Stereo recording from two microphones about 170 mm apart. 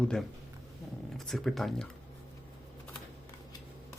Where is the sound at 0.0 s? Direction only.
5° left (ahead or behind).